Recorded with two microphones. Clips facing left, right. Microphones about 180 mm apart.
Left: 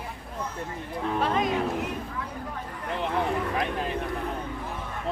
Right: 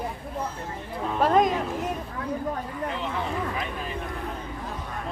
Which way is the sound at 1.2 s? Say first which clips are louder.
Right 7 dB; 45° right (ahead or behind).